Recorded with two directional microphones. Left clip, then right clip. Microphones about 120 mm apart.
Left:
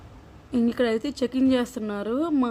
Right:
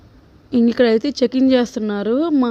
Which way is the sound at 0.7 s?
45° right (ahead or behind).